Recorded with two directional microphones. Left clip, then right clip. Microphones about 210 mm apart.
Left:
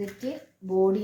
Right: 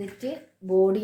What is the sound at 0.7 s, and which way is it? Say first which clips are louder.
Speech: right 2 dB; 35° right (ahead or behind).